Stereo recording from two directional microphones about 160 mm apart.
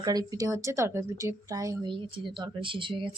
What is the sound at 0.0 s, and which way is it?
A woman's voice, 25° right (ahead or behind).